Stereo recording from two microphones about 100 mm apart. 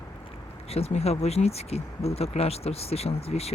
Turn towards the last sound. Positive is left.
turn(degrees=90)